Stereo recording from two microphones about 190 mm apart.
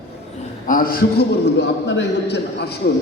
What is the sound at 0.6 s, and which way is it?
A man's voice, 45° left (ahead or behind).